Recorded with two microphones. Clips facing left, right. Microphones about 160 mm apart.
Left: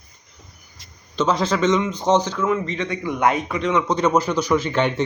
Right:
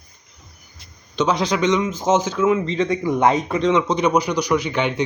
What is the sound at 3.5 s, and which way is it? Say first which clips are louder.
Mantra: right 3 dB; 30° right (ahead or behind).